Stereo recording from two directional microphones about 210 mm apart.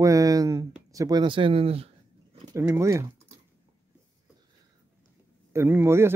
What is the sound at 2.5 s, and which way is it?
Speech, 15° right (ahead or behind).